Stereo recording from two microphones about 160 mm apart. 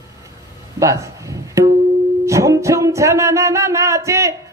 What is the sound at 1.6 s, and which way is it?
Music, 20° right (ahead or behind).